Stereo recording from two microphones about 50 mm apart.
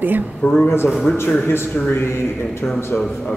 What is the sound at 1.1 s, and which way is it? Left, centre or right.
Speech, left.